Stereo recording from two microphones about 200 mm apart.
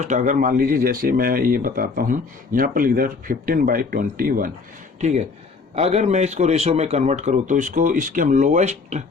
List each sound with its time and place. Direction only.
0.0 s a man's voice: 40° right (ahead or behind)